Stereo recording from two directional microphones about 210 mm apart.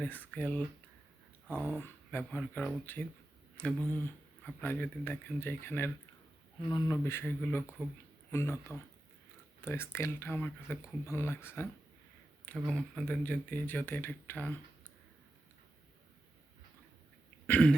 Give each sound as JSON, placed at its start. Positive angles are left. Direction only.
{"t": 0.0, "sound": "speech", "side_deg": 5}
{"t": 1.7, "sound": "speech", "side_deg": 10}
{"t": 17.4, "sound": "throat clearing", "side_deg": 5}